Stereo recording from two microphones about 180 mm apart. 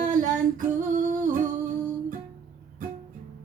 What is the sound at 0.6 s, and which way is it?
Female singing, 45° right (ahead or behind).